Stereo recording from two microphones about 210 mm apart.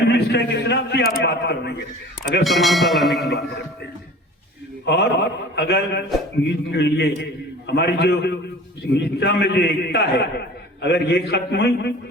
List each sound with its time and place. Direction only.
0.1 s a man's voice: 50° left (ahead or behind)
2.4 s speech: centre (ahead or behind)
3.2 s a man's voice: 50° left (ahead or behind)
4.9 s a man's voice: 55° left (ahead or behind)